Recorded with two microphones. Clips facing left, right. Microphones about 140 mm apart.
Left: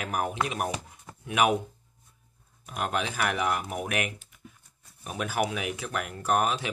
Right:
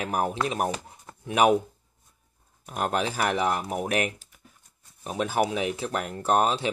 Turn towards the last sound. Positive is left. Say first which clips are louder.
# right 3 dB
turn(degrees=-30)  # may be behind; listen again after turning